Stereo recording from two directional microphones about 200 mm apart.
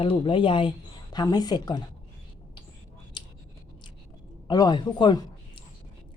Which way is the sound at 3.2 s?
25° left (ahead or behind).